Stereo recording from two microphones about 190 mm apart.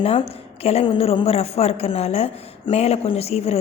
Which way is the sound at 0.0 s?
30° left (ahead or behind).